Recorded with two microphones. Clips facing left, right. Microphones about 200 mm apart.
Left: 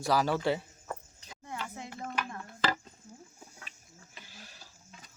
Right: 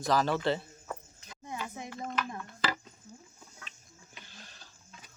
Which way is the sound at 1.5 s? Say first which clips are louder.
Right 1 dB; 15° right (ahead or behind).